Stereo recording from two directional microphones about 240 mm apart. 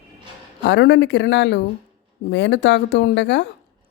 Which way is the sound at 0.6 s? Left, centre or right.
Left.